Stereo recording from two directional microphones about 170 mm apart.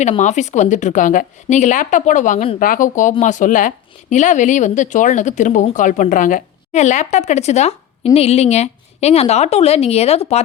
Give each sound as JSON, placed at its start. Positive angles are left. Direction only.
{"t": 0.0, "sound": "a woman's voice", "side_deg": 45}